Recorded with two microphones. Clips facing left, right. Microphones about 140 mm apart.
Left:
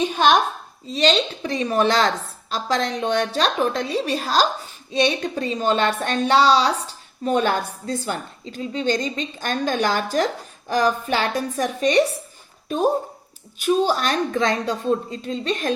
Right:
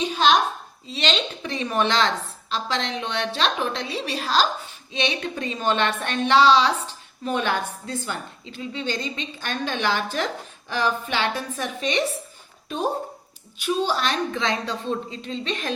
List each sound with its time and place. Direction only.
0.0 s a woman's voice: 50° left (ahead or behind)
0.9 s a woman's voice: 40° left (ahead or behind)